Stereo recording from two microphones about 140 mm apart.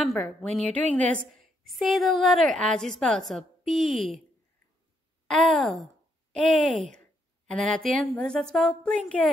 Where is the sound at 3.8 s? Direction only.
65° right (ahead or behind).